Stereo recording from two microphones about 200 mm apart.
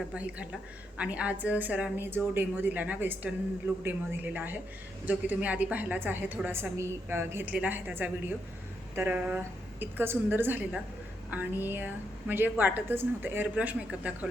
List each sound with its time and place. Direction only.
0.1 s a woman's voice: 5° right (ahead or behind)